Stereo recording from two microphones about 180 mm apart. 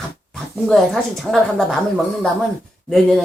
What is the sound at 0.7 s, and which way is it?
Speech, centre (ahead or behind).